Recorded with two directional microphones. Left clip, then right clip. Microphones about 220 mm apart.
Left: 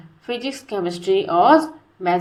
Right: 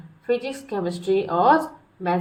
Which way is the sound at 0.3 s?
20° left (ahead or behind).